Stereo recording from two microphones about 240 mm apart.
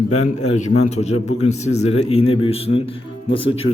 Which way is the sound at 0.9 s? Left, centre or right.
Left.